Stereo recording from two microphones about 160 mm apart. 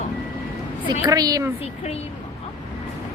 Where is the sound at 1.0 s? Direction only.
20° right (ahead or behind).